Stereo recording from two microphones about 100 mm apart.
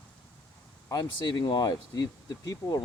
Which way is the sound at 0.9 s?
50° left (ahead or behind).